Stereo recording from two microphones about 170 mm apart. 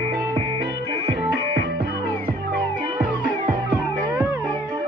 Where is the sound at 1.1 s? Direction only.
20° right (ahead or behind).